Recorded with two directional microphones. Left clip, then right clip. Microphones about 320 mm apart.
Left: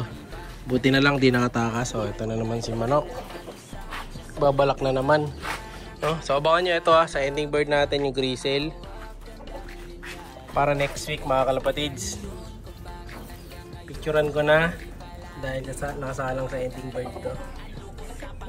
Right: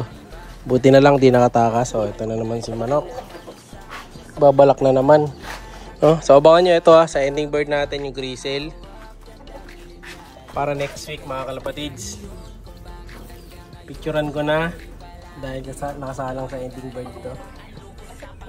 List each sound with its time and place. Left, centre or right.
0.7 s speech: right
2.7 s speech: centre
4.4 s speech: centre
10.5 s speech: centre
14.0 s speech: centre
15.6 s speech: centre